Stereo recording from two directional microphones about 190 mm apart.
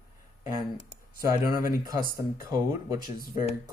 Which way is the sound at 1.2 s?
15° right (ahead or behind).